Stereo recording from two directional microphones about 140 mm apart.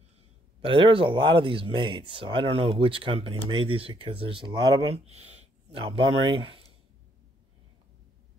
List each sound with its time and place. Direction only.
0.6 s speech: 40° right (ahead or behind)